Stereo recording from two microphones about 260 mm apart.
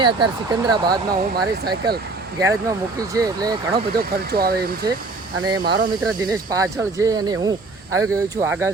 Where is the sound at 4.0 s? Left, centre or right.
Right.